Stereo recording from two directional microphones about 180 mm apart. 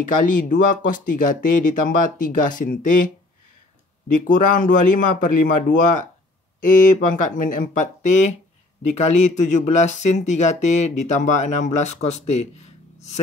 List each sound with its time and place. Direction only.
0.5 s speech: 50° left (ahead or behind)
4.1 s speech: 45° left (ahead or behind)